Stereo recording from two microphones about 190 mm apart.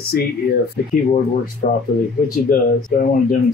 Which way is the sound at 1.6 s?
50° left (ahead or behind).